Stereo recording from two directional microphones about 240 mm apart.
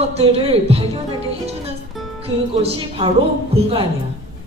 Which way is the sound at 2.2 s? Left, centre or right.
Right.